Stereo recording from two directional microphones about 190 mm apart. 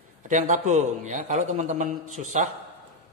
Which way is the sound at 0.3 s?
40° right (ahead or behind).